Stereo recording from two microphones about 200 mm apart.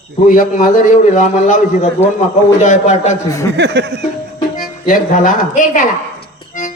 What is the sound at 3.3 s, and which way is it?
Speech, 15° left (ahead or behind).